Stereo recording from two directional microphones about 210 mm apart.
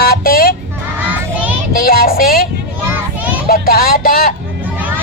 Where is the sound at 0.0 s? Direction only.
45° left (ahead or behind).